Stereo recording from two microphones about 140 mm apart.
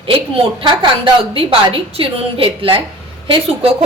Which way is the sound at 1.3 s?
40° right (ahead or behind).